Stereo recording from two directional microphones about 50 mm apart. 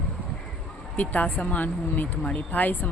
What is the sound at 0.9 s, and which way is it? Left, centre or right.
Speech, left.